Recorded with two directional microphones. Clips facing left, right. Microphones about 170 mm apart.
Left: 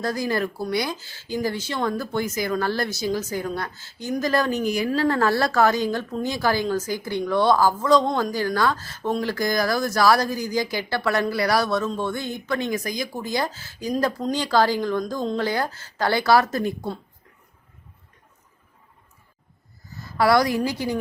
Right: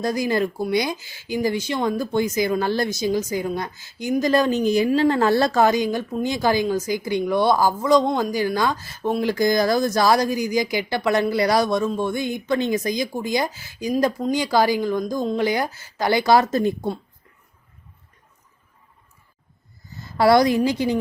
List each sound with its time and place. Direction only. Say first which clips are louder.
0.0 s speech: right 3 dB; 15° right (ahead or behind)
19.9 s a sound: right 3 dB; 20° right (ahead or behind)
20.7 s a woman's voice: right 4 dB; 20° right (ahead or behind)